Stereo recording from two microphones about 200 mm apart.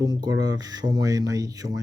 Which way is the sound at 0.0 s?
20° right (ahead or behind).